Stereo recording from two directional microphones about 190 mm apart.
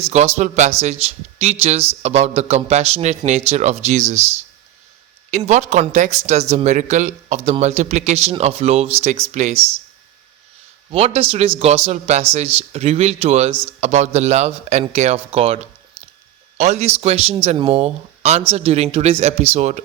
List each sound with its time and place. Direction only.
0.3 s speech: 40° right (ahead or behind)
5.5 s speech: 40° right (ahead or behind)
10.9 s speech: 30° right (ahead or behind)